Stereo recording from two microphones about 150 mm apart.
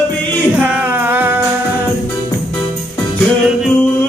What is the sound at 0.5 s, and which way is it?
Singing, 10° right (ahead or behind).